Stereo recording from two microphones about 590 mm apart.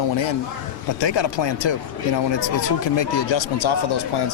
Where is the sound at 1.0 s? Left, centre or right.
Left.